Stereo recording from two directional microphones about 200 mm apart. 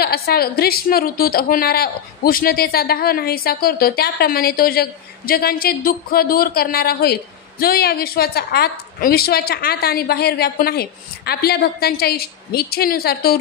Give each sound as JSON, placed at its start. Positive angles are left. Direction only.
{"t": 0.0, "sound": "a woman's voice", "side_deg": 50}